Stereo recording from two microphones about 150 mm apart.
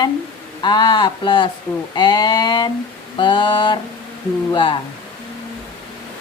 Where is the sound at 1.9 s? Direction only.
30° left (ahead or behind).